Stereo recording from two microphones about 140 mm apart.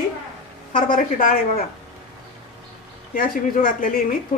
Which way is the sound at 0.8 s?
70° left (ahead or behind).